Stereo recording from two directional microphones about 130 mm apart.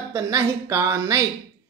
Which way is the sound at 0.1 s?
25° right (ahead or behind).